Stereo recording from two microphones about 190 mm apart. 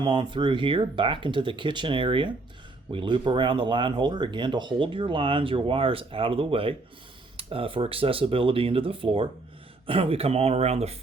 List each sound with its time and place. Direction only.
0.0 s speech: 25° right (ahead or behind)